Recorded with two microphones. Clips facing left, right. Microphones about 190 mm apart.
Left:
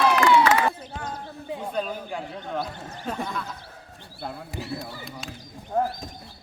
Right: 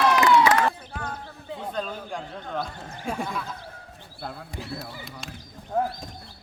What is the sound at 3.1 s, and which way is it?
Speech, 10° right (ahead or behind).